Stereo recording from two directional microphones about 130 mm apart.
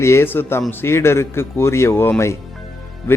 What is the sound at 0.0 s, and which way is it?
Speech, 20° left (ahead or behind).